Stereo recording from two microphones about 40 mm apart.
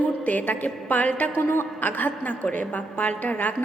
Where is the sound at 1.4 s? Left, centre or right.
Left.